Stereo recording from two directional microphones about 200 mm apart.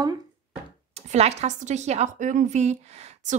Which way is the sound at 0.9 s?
30° right (ahead or behind).